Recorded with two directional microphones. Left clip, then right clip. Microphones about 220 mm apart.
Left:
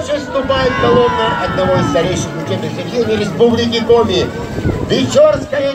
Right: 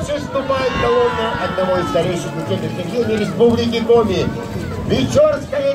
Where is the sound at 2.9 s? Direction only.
40° right (ahead or behind).